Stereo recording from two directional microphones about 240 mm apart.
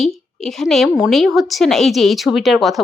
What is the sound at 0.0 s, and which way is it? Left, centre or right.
A woman's voice, centre.